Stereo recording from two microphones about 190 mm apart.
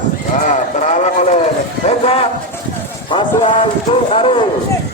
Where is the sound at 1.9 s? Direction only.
30° left (ahead or behind).